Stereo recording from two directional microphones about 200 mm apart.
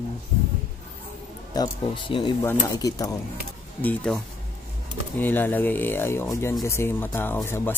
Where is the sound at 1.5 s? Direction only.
20° left (ahead or behind).